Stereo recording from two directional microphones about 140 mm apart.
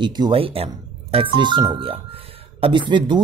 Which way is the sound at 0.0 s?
35° right (ahead or behind).